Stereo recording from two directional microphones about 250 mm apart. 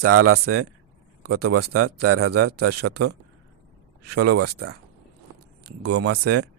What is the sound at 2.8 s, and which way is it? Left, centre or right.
Speech, right.